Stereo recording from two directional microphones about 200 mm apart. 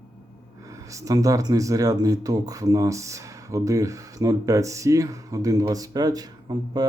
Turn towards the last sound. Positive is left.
turn(degrees=-20)  # may be behind; listen again after turning